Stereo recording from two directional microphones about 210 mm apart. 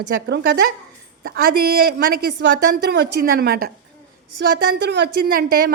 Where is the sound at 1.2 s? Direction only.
45° right (ahead or behind).